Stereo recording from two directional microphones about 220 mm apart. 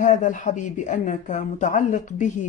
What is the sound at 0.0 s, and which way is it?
Speech, 35° left (ahead or behind).